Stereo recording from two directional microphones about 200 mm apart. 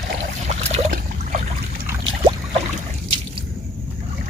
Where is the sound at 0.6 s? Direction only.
30° right (ahead or behind).